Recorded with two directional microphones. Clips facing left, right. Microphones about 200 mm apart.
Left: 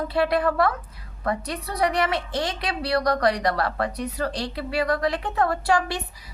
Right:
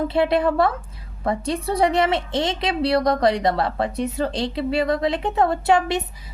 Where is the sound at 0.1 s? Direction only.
25° right (ahead or behind).